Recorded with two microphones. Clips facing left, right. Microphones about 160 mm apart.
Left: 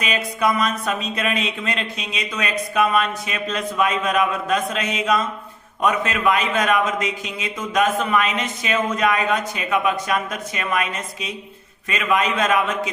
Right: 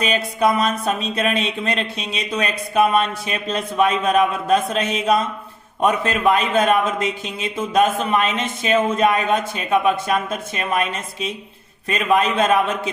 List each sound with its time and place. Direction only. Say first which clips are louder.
0.0 s a man's voice: right 3 dB; 30° right (ahead or behind)